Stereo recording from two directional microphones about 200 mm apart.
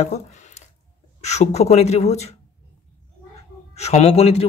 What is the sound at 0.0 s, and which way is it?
Speech, 35° left (ahead or behind).